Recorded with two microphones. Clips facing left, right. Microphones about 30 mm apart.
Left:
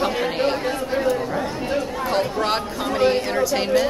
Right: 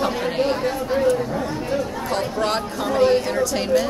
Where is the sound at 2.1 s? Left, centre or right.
Centre.